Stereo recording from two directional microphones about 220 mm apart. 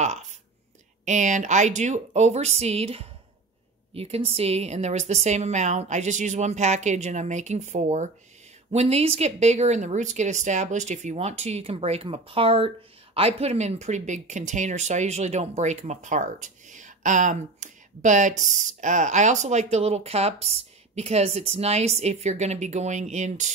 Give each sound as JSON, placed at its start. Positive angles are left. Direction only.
{"t": 1.0, "sound": "speech", "side_deg": -35}